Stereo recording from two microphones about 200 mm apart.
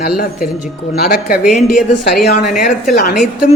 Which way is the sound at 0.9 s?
45° left (ahead or behind).